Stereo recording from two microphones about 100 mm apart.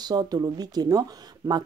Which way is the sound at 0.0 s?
45° right (ahead or behind).